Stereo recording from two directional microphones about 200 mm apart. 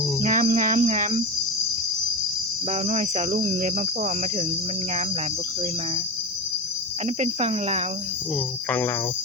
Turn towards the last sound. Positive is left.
turn(degrees=-35)  # may be behind; listen again after turning